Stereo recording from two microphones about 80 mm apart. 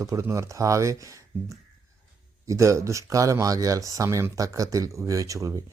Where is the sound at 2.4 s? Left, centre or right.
Right.